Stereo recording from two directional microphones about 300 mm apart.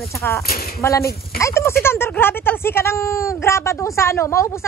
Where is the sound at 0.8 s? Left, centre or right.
Centre.